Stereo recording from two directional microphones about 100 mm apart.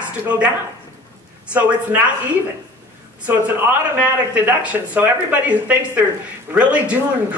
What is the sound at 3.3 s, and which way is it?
Speech, 20° right (ahead or behind).